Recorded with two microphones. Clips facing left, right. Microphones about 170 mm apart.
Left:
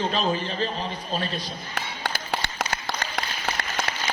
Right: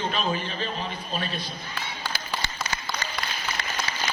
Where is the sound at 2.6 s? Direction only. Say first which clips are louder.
Left 3 dB; 80° left.